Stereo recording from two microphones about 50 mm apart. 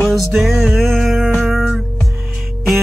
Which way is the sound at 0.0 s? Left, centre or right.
Centre.